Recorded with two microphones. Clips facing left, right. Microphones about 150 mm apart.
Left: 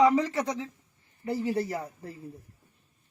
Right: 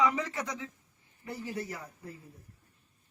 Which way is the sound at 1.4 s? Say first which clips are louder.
Left 7 dB; 80° left.